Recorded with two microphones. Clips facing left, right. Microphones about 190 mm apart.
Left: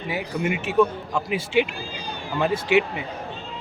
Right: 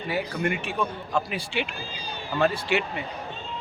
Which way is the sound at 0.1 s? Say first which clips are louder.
Left 1 dB; 5° left (ahead or behind).